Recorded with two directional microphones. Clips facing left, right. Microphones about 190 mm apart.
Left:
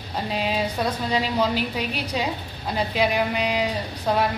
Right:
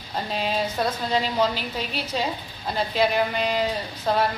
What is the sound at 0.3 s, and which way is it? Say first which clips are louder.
A woman's voice: left 1 dB; 5° left (ahead or behind).